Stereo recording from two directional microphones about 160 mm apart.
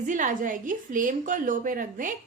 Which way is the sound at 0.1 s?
55° right (ahead or behind).